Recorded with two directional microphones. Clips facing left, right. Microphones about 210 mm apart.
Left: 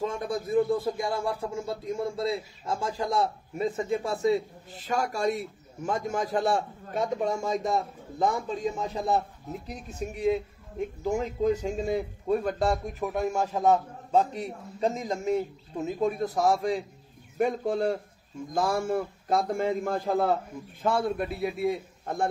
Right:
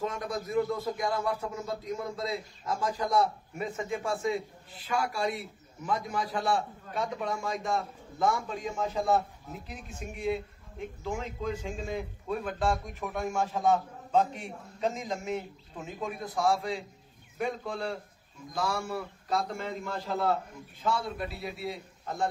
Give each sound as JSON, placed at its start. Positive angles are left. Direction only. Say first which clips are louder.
{"t": 0.0, "sound": "a man's voice", "louder": "left 4 dB", "side_deg": 30}